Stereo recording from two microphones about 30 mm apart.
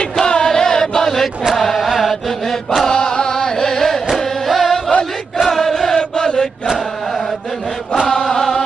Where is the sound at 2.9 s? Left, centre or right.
Left.